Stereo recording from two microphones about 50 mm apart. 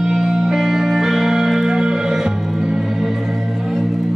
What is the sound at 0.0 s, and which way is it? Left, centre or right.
Music, centre.